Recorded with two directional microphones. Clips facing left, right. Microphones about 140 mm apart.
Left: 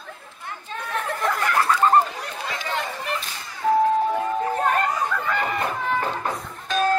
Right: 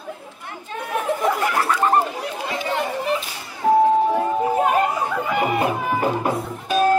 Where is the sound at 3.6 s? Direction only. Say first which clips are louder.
Right 3 dB; 15° right (ahead or behind).